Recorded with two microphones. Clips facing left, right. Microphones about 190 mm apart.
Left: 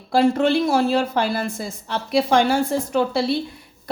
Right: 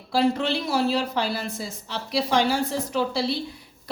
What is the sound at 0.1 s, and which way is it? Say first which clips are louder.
A woman's voice: left 5 dB; 50° left (ahead or behind).